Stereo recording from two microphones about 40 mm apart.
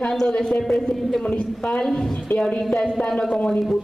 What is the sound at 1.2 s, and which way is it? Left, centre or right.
Speech, left.